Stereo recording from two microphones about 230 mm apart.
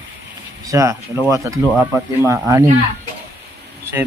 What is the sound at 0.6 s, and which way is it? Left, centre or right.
Speech, centre.